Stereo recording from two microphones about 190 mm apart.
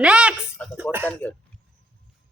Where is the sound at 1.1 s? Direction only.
10° left (ahead or behind).